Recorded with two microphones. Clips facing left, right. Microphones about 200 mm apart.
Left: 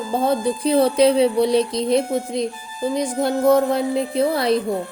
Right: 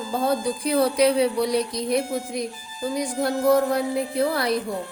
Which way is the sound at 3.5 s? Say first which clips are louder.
Left 3 dB; 25° left (ahead or behind).